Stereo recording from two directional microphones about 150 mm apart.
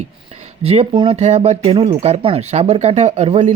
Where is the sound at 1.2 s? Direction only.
50° right (ahead or behind).